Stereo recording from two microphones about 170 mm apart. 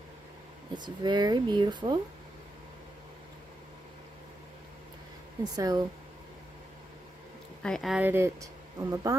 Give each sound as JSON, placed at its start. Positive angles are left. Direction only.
{"t": 0.7, "sound": "speech", "side_deg": -25}
{"t": 5.4, "sound": "speech", "side_deg": -20}
{"t": 7.6, "sound": "speech", "side_deg": 0}